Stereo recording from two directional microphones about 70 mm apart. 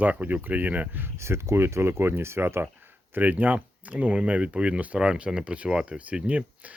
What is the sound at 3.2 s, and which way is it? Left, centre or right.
Speech, right.